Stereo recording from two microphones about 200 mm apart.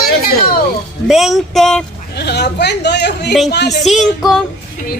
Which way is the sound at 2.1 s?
55° left (ahead or behind).